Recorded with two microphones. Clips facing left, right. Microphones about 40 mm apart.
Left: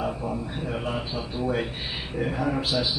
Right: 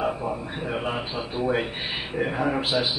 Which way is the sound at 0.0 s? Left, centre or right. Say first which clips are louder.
Right 2 dB; right.